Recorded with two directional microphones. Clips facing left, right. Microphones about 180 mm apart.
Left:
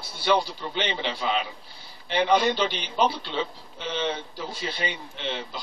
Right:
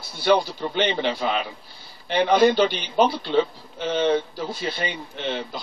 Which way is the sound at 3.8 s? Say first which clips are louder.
Right 8 dB; 45° right (ahead or behind).